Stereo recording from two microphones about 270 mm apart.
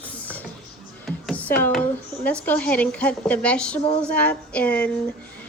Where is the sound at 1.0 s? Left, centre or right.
Centre.